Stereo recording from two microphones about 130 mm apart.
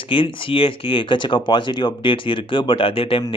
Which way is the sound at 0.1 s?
45° left (ahead or behind).